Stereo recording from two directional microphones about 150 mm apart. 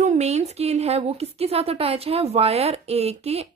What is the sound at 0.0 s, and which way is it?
A woman's voice, 50° right (ahead or behind).